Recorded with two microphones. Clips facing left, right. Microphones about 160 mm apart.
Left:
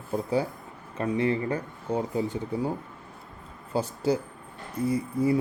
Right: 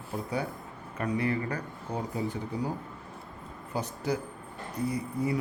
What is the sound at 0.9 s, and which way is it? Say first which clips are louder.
Speech: left 4 dB; 25° left (ahead or behind).